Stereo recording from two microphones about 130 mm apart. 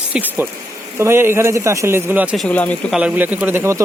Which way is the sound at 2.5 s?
10° left (ahead or behind).